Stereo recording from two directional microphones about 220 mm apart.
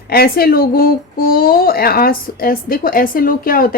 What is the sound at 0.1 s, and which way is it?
Speech, 45° left (ahead or behind).